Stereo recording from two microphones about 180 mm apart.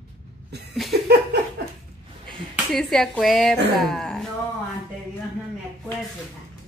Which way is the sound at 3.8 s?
Centre (ahead or behind).